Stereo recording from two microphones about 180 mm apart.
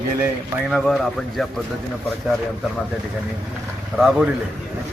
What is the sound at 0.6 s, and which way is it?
Speech, centre (ahead or behind).